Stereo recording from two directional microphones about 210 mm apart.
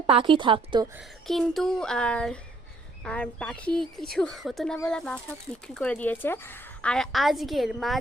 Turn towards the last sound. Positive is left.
turn(degrees=0)  # may be behind; listen again after turning